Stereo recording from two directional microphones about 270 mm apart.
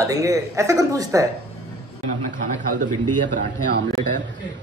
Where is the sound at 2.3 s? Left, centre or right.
Right.